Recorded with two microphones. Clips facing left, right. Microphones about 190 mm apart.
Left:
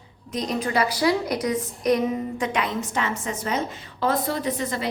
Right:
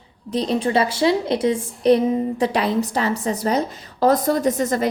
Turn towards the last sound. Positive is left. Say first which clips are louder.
# right 7 dB
turn(degrees=-45)  # may be behind; listen again after turning